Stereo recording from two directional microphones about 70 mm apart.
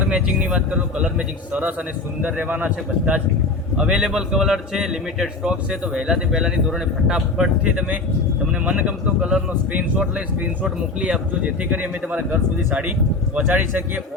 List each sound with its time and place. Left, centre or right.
0.0 s a man's voice: centre
2.2 s speech: centre
3.8 s a man's voice: centre